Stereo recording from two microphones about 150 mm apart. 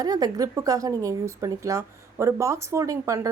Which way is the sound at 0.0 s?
25° right (ahead or behind).